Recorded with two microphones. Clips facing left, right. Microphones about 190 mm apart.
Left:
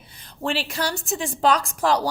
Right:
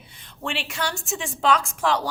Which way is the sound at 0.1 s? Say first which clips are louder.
Left 5 dB; 35° left (ahead or behind).